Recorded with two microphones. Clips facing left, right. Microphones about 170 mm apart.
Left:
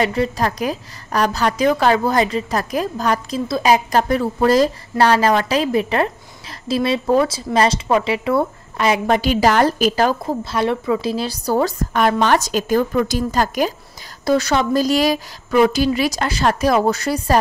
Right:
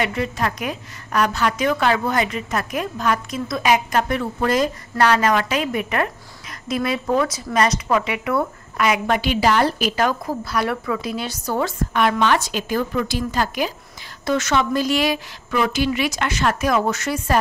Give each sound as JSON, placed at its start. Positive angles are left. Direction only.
{"t": 0.0, "sound": "speech", "side_deg": 35}